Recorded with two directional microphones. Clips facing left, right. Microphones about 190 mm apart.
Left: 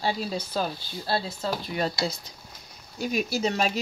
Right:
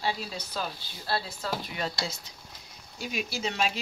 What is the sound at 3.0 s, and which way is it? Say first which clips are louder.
Speech: left 7 dB; 40° left (ahead or behind).